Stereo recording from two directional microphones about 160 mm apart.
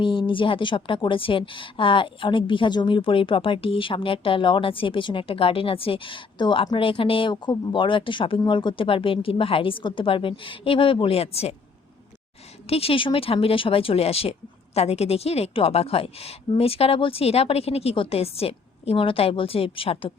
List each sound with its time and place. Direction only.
0.0 s a woman's voice: 30° left (ahead or behind)
12.6 s a woman's voice: 40° left (ahead or behind)